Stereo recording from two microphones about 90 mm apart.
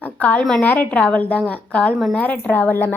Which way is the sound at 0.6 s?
15° left (ahead or behind).